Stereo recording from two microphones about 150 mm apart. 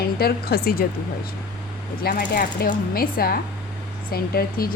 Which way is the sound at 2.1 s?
60° left (ahead or behind).